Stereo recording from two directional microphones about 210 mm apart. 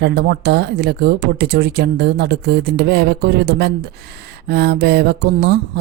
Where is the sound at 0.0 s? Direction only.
50° right (ahead or behind).